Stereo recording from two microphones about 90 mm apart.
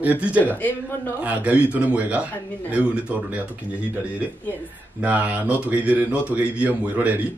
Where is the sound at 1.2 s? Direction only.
15° right (ahead or behind).